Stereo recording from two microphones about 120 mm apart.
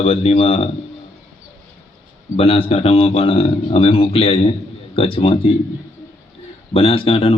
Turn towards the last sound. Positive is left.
turn(degrees=55)  # may be behind; listen again after turning